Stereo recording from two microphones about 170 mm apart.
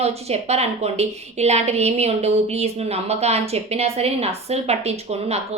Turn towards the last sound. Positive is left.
turn(degrees=-40)  # may be behind; listen again after turning